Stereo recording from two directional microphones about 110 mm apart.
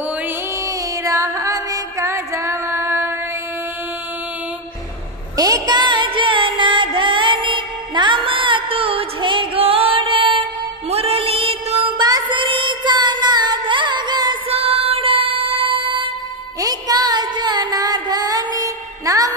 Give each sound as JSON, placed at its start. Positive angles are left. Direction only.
{"t": 0.7, "sound": "music", "side_deg": -30}
{"t": 5.3, "sound": "music", "side_deg": -35}
{"t": 10.9, "sound": "music", "side_deg": -65}
{"t": 12.0, "sound": "child singing", "side_deg": -40}
{"t": 14.5, "sound": "music", "side_deg": -60}
{"t": 16.5, "sound": "music", "side_deg": -35}